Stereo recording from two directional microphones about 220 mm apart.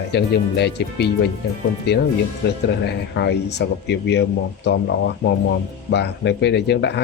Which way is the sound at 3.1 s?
50° left (ahead or behind).